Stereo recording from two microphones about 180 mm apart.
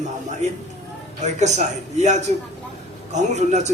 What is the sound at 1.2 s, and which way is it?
Speech, 40° right (ahead or behind).